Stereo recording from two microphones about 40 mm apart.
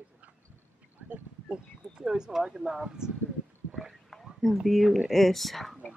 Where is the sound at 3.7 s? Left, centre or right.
Right.